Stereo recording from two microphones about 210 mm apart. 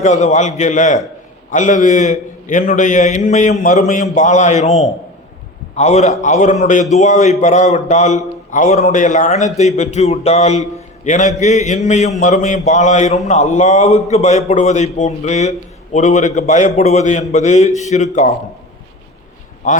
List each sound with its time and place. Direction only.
0.0 s a man's voice: 35° left (ahead or behind)